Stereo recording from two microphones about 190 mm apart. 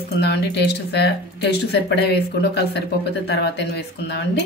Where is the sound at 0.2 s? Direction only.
60° left (ahead or behind).